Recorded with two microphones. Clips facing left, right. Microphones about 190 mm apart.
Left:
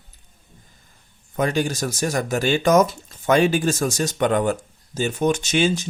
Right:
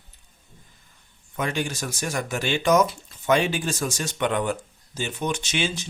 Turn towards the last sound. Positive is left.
turn(degrees=45)  # may be behind; listen again after turning